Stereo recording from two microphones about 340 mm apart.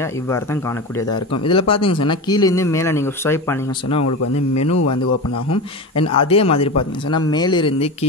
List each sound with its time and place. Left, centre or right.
0.3 s speech: centre
5.5 s speech: centre